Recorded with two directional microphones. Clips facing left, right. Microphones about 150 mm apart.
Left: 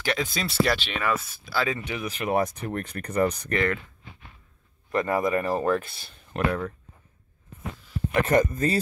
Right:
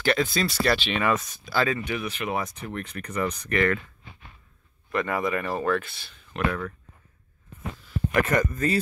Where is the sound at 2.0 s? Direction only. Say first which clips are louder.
Left 4 dB; 35° left (ahead or behind).